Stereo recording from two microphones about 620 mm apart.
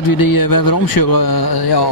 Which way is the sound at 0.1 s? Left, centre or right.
Left.